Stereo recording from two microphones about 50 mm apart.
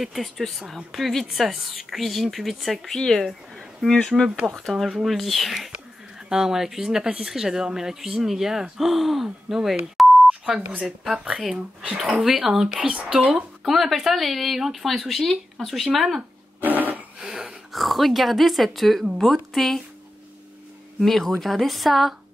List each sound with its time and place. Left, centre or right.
0.0 s speech: centre
4.6 s speech: centre
10.6 s speech: right
11.1 s speech: centre
12.1 s speech: centre; by 13.3 s right
13.3 s speech: centre
16.6 s a sound: right
17.2 s wheeze: centre
17.7 s speech: centre
21.0 s speech: centre